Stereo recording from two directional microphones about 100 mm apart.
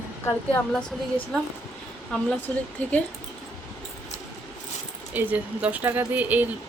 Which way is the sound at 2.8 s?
15° left (ahead or behind).